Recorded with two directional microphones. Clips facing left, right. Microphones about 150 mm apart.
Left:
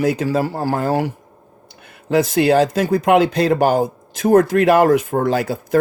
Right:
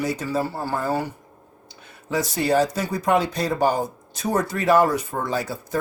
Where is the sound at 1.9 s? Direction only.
60° left (ahead or behind); by 4.3 s 90° left.